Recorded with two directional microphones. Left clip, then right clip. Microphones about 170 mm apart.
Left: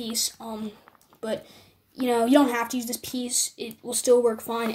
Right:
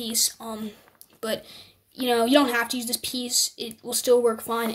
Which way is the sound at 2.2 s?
10° right (ahead or behind).